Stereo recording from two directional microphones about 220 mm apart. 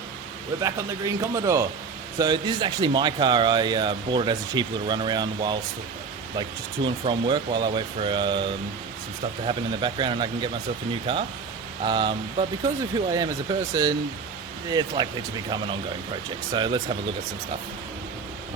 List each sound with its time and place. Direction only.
0.6 s speech: 15° right (ahead or behind)
6.8 s speech: 20° right (ahead or behind)
9.5 s speech: 20° right (ahead or behind)
14.7 s speech: 15° right (ahead or behind)
16.5 s speech: 20° right (ahead or behind)